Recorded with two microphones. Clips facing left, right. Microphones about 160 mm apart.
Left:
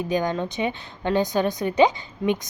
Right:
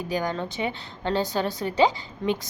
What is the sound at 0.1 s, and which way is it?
A woman's voice, 20° left (ahead or behind).